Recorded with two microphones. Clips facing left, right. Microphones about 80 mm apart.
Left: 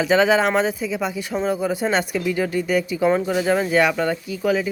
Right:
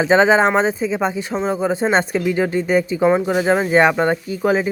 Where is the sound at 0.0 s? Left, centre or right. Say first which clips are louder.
Right 3 dB; right.